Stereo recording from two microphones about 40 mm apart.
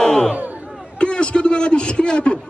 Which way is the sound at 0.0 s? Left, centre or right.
Centre.